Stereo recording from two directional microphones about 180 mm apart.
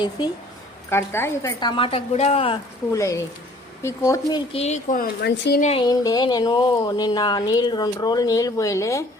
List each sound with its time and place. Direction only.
0.2 s speech: 25° left (ahead or behind)
0.9 s speech: 15° left (ahead or behind); by 2.6 s 35° left (ahead or behind)
2.9 s speech: 15° left (ahead or behind)
4.5 s speech: 40° left (ahead or behind); by 5.5 s 65° left (ahead or behind)
5.5 s speech: 40° left (ahead or behind)
5.8 s speech: 20° left (ahead or behind)